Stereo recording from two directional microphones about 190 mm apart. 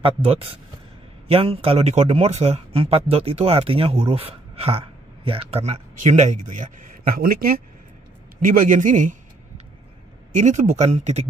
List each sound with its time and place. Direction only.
0.0 s a man's voice: 30° right (ahead or behind)
10.3 s speech: 40° right (ahead or behind)